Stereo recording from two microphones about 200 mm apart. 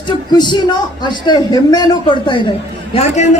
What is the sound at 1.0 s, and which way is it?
A man's voice, 20° left (ahead or behind).